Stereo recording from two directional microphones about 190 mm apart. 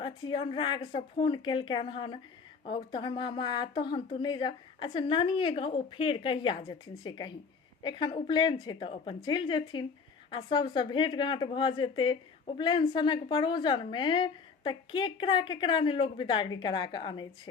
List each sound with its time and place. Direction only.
0.0 s a woman's voice: 25° left (ahead or behind)